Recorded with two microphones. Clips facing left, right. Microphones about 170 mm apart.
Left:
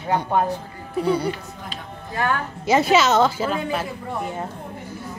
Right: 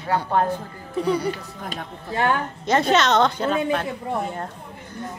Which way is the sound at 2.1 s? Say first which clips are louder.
Right 2 dB; 25° right (ahead or behind).